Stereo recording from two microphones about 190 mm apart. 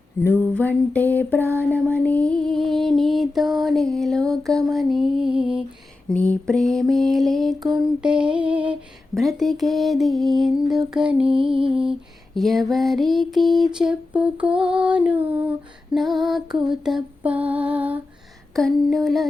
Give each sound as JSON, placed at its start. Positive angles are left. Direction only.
{"t": 0.2, "sound": "a sound", "side_deg": 10}
{"t": 1.5, "sound": "lullaby", "side_deg": 10}
{"t": 11.5, "sound": "lullaby", "side_deg": -30}
{"t": 11.8, "sound": "lullaby", "side_deg": 0}